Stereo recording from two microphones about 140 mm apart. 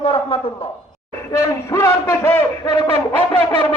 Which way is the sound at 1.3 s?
20° left (ahead or behind).